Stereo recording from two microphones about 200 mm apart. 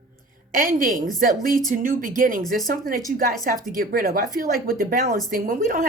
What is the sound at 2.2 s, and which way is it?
A woman's voice, 45° right (ahead or behind).